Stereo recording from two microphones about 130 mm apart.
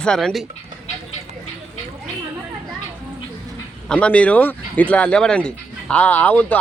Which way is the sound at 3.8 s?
10° left (ahead or behind).